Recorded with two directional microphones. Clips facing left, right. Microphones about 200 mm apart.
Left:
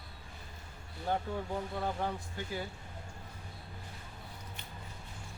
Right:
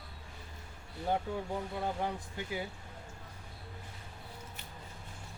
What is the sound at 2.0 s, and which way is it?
Speech, 15° right (ahead or behind).